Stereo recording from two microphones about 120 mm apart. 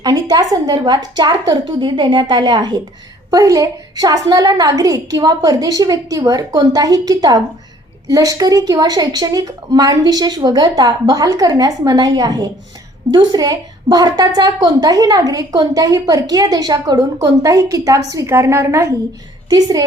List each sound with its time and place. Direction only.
0.0 s a woman's voice: 35° right (ahead or behind)